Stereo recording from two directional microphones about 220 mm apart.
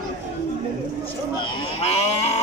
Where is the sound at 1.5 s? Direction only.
25° left (ahead or behind).